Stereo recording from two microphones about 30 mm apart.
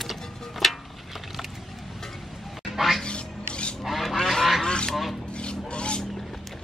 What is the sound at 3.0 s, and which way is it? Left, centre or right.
Music, left.